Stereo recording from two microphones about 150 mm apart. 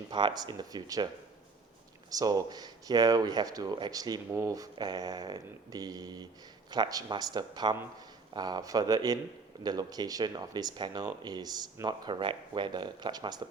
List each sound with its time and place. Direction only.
0.1 s speech: 30° right (ahead or behind)
2.0 s speech: 25° right (ahead or behind)